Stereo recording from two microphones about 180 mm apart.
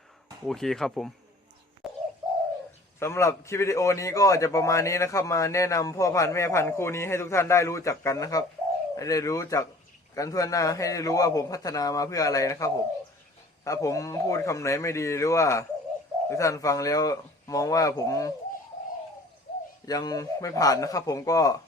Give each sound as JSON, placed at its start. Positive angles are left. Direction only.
{"t": 0.4, "sound": "speech", "side_deg": 0}
{"t": 1.8, "sound": "bird", "side_deg": 0}
{"t": 3.0, "sound": "a man's voice", "side_deg": 15}
{"t": 19.8, "sound": "a man's voice", "side_deg": 20}